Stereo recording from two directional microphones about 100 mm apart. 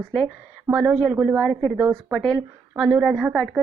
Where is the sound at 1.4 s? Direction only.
5° left (ahead or behind).